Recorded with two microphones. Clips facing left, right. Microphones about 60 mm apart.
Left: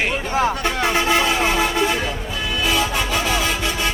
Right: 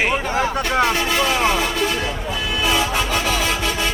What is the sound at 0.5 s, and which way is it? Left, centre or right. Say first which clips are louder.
Speech: right 3 dB; right.